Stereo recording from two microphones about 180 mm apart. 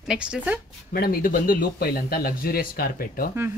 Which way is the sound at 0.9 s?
55° left (ahead or behind).